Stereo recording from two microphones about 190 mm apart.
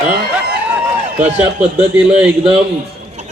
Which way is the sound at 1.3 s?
5° right (ahead or behind).